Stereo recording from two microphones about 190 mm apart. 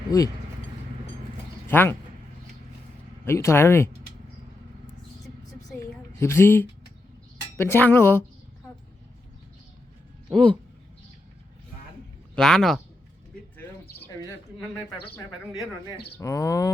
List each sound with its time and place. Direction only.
0.1 s speech: 20° left (ahead or behind)
1.6 s speech: 10° left (ahead or behind)
3.2 s speech: 15° left (ahead or behind)
6.1 s speech: 15° left (ahead or behind)
10.3 s speech: 5° left (ahead or behind)
12.4 s speech: centre (ahead or behind)
15.1 s speech: 20° left (ahead or behind)